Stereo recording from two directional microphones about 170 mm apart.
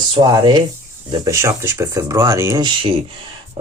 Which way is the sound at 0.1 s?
25° right (ahead or behind).